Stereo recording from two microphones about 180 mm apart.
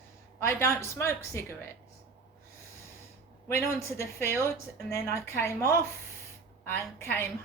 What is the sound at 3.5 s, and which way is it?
Speech, 15° left (ahead or behind).